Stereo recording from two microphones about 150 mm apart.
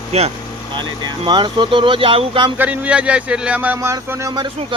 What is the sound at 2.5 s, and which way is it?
Speech, 10° right (ahead or behind).